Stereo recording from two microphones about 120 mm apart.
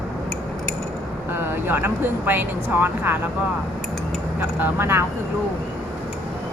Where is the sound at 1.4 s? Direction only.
15° right (ahead or behind).